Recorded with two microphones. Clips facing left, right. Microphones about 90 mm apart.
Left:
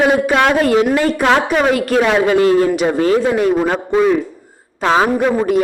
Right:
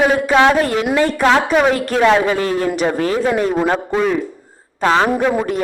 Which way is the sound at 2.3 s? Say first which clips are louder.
Left 6 dB; 20° left (ahead or behind).